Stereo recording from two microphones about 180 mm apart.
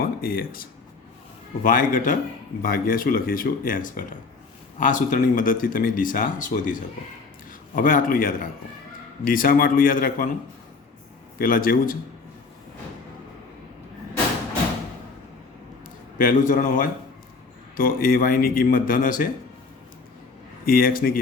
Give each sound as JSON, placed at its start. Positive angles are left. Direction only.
{"t": 0.0, "sound": "speech", "side_deg": 55}
{"t": 11.3, "sound": "speech", "side_deg": 50}
{"t": 16.1, "sound": "speech", "side_deg": 45}
{"t": 20.7, "sound": "a man's voice", "side_deg": 55}